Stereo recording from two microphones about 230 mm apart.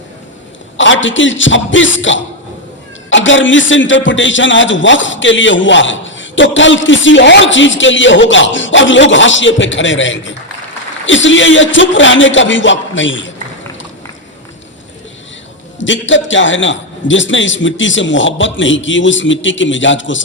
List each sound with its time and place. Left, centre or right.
0.8 s a man's voice: left
15.8 s a man's voice: left